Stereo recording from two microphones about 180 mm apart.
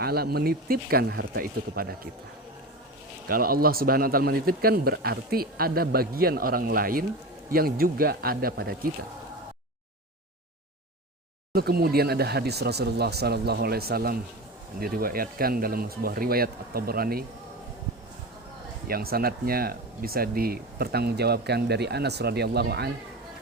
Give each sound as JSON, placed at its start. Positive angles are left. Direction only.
{"t": 0.0, "sound": "speech", "side_deg": -60}
{"t": 3.2, "sound": "speech", "side_deg": -55}
{"t": 11.5, "sound": "speech", "side_deg": -60}
{"t": 18.9, "sound": "speech", "side_deg": -55}